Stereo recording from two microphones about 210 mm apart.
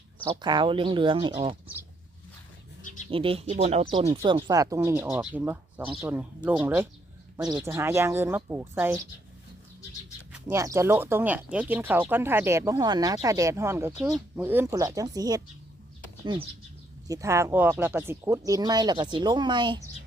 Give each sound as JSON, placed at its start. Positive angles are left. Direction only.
{"t": 0.4, "sound": "speech", "side_deg": -20}
{"t": 3.1, "sound": "speech", "side_deg": -25}
{"t": 10.3, "sound": "speech", "side_deg": -15}
{"t": 17.1, "sound": "speech", "side_deg": -15}